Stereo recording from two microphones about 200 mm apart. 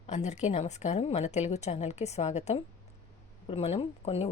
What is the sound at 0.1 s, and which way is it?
A woman's voice, 35° left (ahead or behind).